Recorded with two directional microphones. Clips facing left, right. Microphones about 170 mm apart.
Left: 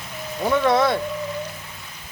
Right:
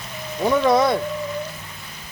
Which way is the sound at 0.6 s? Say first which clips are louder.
Right 1 dB; 15° right (ahead or behind).